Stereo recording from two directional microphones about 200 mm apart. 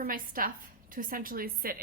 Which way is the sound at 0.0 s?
45° right (ahead or behind).